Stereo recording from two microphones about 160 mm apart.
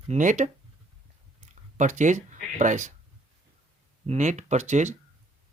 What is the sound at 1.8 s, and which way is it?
Speech, 50° right (ahead or behind).